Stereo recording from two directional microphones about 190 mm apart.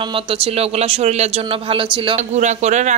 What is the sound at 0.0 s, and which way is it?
Speech, 25° right (ahead or behind).